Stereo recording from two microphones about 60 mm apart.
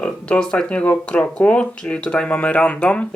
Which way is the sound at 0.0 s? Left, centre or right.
Centre.